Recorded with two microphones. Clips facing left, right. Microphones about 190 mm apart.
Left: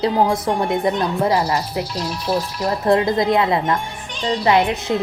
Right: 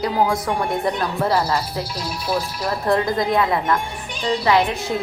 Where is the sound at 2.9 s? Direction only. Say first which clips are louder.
Left 3 dB; 20° left (ahead or behind).